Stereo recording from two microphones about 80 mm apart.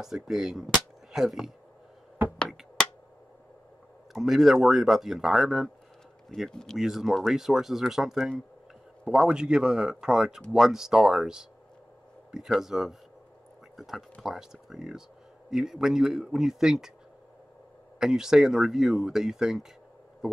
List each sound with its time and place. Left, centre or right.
0.0 s speech: centre
4.1 s speech: centre
12.4 s speech: centre
17.9 s speech: centre